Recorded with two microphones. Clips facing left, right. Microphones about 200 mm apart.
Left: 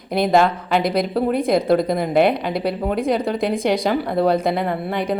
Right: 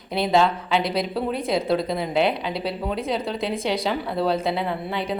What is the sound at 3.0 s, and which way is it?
Speech, 10° left (ahead or behind).